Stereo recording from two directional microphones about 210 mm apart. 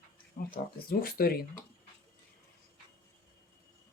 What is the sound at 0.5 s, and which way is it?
Speech, 45° left (ahead or behind).